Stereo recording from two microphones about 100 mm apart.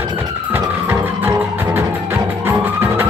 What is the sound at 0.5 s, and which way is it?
Music, 25° right (ahead or behind).